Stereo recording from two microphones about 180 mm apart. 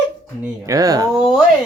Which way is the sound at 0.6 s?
20° right (ahead or behind).